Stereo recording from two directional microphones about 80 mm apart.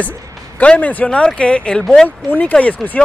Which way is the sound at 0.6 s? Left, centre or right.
Centre.